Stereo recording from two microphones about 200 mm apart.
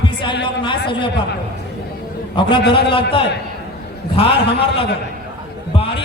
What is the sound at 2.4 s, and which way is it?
Speech, 25° left (ahead or behind).